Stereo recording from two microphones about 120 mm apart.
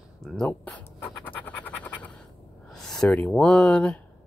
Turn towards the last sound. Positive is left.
turn(degrees=10)  # may be behind; listen again after turning